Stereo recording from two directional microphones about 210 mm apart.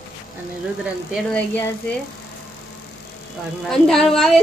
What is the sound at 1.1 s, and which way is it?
Speech, 5° left (ahead or behind).